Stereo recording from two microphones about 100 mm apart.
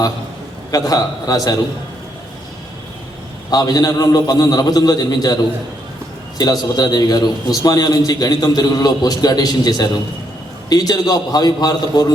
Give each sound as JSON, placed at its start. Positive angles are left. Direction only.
{"t": 0.7, "sound": "a man's voice", "side_deg": 35}
{"t": 3.5, "sound": "a man's voice", "side_deg": 40}
{"t": 6.4, "sound": "a man's voice", "side_deg": 40}